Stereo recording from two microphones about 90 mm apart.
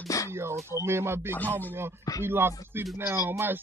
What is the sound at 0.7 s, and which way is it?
Speech, 30° right (ahead or behind).